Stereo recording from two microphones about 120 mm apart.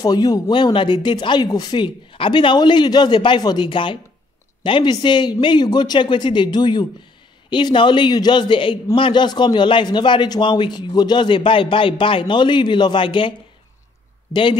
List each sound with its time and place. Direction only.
0.0 s a man's voice: 35° left (ahead or behind)
14.3 s a man's voice: 40° left (ahead or behind)